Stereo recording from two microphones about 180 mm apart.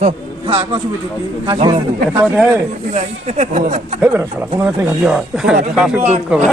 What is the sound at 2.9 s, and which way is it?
Speech, 40° right (ahead or behind).